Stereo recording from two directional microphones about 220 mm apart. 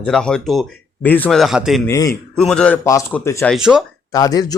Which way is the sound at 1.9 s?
15° left (ahead or behind).